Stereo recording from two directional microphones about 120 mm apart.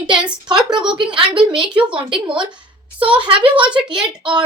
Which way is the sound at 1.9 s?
45° right (ahead or behind).